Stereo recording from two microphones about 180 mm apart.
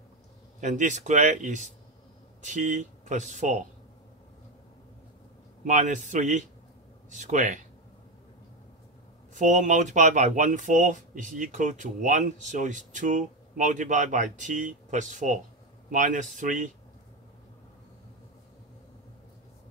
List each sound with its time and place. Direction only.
0.6 s speech: 45° right (ahead or behind)
5.6 s speech: 45° right (ahead or behind)
9.3 s speech: 45° right (ahead or behind)